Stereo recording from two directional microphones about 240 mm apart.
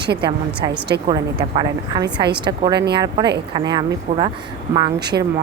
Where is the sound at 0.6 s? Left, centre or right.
Centre.